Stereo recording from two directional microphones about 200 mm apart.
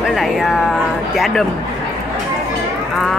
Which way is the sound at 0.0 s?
Centre (ahead or behind).